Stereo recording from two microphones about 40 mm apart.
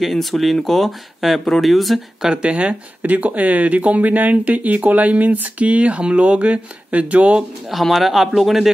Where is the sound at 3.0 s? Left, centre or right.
Right.